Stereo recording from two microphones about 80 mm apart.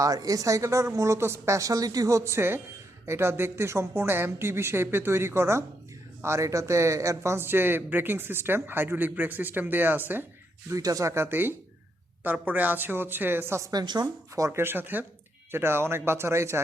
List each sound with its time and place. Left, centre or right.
0.0 s a woman's voice: right
10.7 s speech: right
11.1 s speech: right
13.6 s speech: right
13.8 s speech: right
14.3 s a woman's voice: right